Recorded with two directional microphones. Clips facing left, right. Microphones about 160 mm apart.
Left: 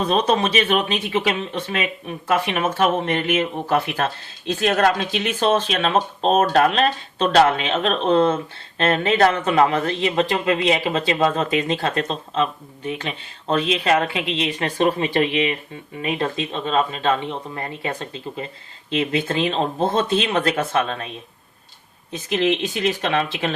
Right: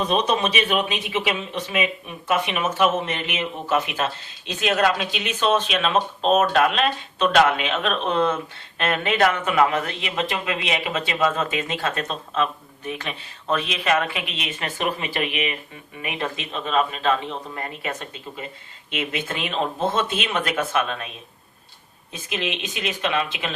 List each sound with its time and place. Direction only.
0.1 s speech: 40° left (ahead or behind)
1.8 s speech: 40° left (ahead or behind)
3.9 s speech: 50° left (ahead or behind); by 21.1 s 35° left (ahead or behind)
22.1 s speech: 35° left (ahead or behind)